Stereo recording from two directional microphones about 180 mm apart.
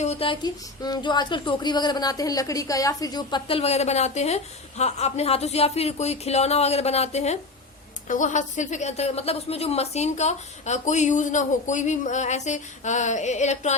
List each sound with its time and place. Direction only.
0.0 s a woman's voice: 35° left (ahead or behind)